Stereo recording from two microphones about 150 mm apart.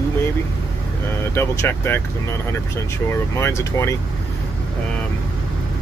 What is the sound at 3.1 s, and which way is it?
Speech, 15° left (ahead or behind).